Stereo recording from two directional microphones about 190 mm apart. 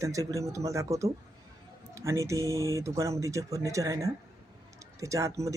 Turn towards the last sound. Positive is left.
turn(degrees=-15)  # may be behind; listen again after turning